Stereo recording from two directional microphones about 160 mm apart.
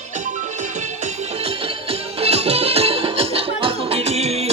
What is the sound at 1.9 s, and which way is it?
Music, 40° right (ahead or behind).